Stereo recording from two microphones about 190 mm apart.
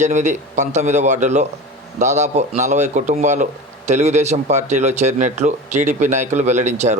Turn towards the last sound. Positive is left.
turn(degrees=-40)  # may be behind; listen again after turning